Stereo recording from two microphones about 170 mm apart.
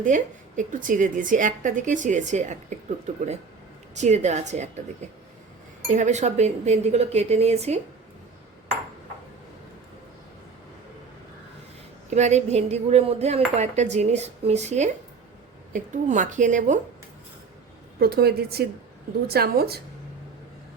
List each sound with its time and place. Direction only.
0.0 s a woman's voice: 50° right (ahead or behind)
3.9 s a woman's voice: 40° right (ahead or behind)
5.9 s cutlery: 45° right (ahead or behind)
12.1 s cutlery: 40° right (ahead or behind)
15.7 s a woman's voice: 50° right (ahead or behind)
18.0 s a woman's voice: 65° right (ahead or behind)